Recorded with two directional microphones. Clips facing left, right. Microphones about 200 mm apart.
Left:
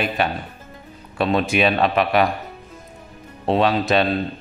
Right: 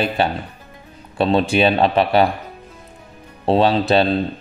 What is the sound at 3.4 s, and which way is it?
Speech, 30° right (ahead or behind).